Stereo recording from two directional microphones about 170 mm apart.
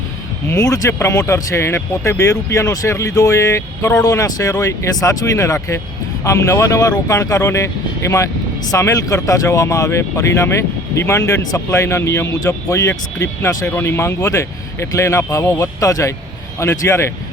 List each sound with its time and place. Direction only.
0.4 s speech: 20° left (ahead or behind)